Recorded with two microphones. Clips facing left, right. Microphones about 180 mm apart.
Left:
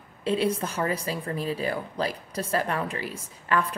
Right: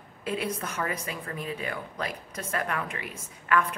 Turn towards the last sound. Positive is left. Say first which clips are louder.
# even
turn(degrees=30)  # may be behind; listen again after turning